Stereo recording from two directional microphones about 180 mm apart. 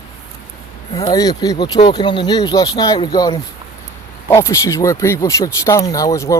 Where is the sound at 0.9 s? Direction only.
25° left (ahead or behind).